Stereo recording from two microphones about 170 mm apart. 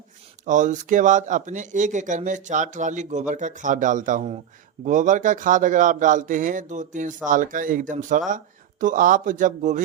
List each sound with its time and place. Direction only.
0.4 s a man's voice: 45° right (ahead or behind)